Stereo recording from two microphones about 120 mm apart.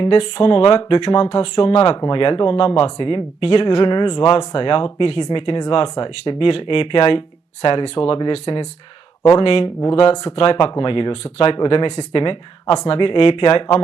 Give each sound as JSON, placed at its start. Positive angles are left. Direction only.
{"t": 0.0, "sound": "speech", "side_deg": 55}
{"t": 3.8, "sound": "speech", "side_deg": 40}
{"t": 12.7, "sound": "speech", "side_deg": 60}